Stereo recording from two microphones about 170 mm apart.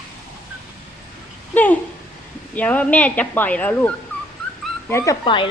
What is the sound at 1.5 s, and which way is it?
Speech, 10° left (ahead or behind).